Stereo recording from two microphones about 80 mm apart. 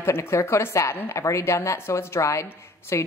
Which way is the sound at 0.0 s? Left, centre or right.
Left.